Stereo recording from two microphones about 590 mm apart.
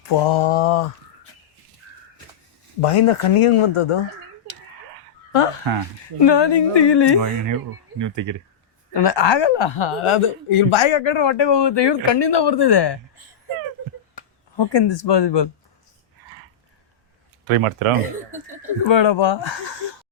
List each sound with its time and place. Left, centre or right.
0.0 s speech: left
2.8 s speech: left
5.3 s speech: left
6.1 s speech: left
7.2 s speech: right
8.9 s speech: left
14.5 s speech: left
17.5 s speech: right
18.9 s speech: left